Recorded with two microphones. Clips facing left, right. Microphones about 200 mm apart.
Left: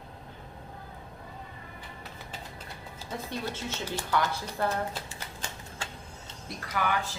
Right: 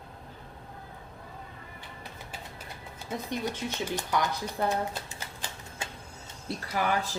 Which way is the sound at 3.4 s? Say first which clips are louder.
Right 3 dB; 15° right (ahead or behind).